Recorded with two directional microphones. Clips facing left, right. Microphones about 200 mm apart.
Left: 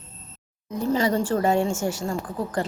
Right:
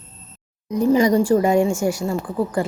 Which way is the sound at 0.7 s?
15° right (ahead or behind).